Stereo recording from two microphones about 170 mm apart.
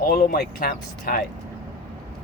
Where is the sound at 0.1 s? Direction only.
60° left (ahead or behind).